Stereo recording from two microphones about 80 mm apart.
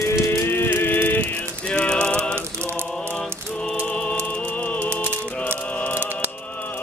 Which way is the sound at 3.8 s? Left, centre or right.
Centre.